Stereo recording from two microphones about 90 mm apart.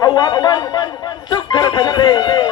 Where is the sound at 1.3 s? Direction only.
50° left (ahead or behind).